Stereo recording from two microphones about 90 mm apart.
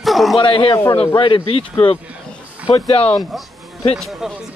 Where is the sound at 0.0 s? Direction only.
Centre (ahead or behind).